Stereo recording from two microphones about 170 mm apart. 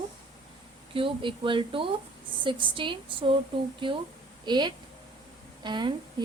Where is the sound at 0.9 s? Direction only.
30° right (ahead or behind).